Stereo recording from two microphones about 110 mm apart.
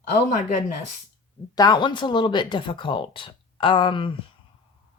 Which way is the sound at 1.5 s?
40° left (ahead or behind).